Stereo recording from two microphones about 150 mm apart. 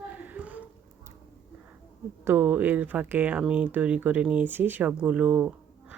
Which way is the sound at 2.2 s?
15° right (ahead or behind).